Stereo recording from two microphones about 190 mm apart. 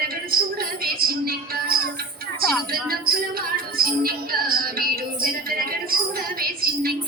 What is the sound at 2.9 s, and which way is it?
Music, 50° right (ahead or behind).